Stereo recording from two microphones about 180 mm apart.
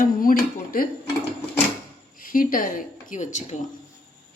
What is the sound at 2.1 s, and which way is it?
A woman's voice, 50° left (ahead or behind).